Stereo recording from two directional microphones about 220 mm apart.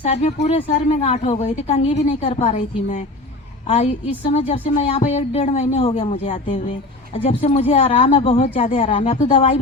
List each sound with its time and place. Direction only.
0.1 s a woman's voice: 30° left (ahead or behind)